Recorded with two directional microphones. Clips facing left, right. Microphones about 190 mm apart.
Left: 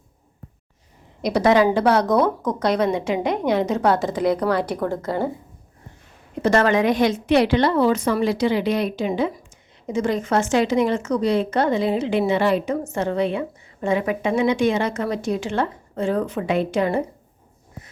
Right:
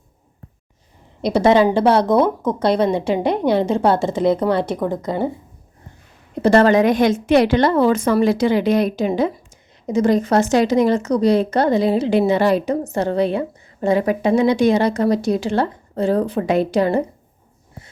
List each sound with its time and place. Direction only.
1.2 s speech: 25° right (ahead or behind)
6.4 s a woman's voice: 35° right (ahead or behind)